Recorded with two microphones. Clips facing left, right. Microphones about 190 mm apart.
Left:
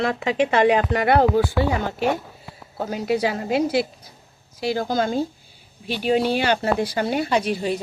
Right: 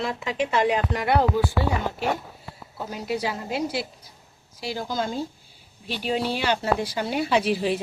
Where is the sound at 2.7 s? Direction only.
75° left (ahead or behind).